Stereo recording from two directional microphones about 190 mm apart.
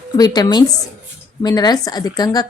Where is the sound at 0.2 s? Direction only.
20° left (ahead or behind).